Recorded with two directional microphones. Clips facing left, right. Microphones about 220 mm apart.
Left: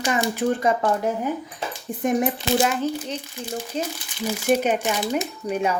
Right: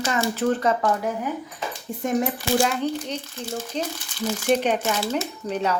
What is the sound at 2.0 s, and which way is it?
Speech, 20° left (ahead or behind).